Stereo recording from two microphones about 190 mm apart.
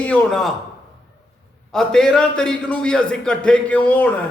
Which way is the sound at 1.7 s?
5° left (ahead or behind).